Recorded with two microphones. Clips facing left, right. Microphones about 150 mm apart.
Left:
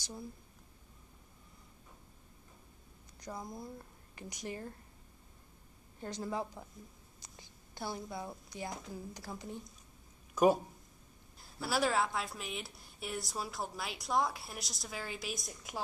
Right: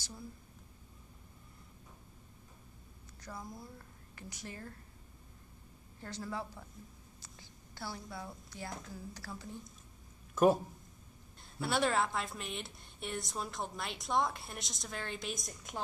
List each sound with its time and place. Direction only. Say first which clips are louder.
3.2 s a woman's voice: left 3 dB; 15° left (ahead or behind)
5.9 s speech: left 3 dB; 15° left (ahead or behind)
7.2 s a sound: even; 20° left (ahead or behind)
8.7 s speech: left 2 dB; 10° left (ahead or behind)
10.3 s a woman's voice: even; centre (ahead or behind)